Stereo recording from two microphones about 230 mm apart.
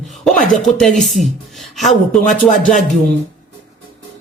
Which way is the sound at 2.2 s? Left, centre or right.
Left.